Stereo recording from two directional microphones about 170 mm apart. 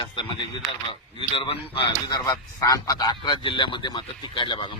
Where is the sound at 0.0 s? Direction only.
30° left (ahead or behind).